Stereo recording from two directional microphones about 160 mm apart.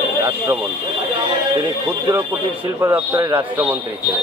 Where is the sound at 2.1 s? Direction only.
10° right (ahead or behind).